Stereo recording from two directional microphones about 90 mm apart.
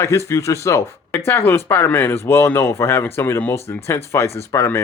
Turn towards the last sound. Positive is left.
turn(degrees=30)  # may be behind; listen again after turning